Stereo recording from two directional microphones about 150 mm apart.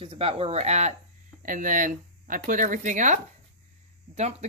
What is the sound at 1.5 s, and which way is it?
Speech, 60° right (ahead or behind).